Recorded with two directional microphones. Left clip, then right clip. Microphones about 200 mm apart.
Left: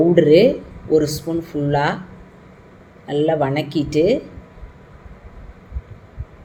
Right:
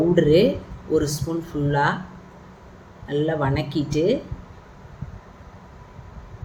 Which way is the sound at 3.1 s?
5° left (ahead or behind).